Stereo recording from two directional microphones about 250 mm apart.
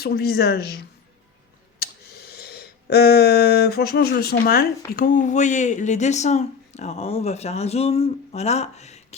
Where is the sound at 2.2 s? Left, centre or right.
Left.